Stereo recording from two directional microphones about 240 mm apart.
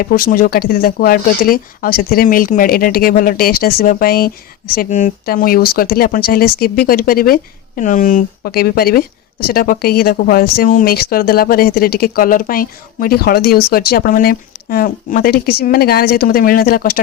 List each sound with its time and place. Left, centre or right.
0.0 s speech: left